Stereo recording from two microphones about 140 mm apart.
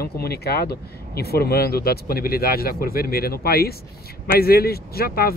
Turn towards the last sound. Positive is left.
turn(degrees=90)